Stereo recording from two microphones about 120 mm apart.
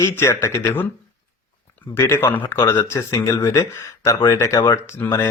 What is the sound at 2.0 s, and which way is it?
Speech, 20° left (ahead or behind).